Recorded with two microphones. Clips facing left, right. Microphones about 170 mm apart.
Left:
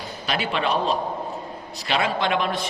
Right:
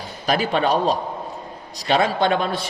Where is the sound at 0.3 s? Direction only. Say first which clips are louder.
Right 5 dB; 40° right (ahead or behind).